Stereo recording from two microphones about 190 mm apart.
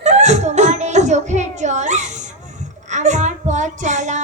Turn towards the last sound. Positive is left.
turn(degrees=-40)  # may be behind; listen again after turning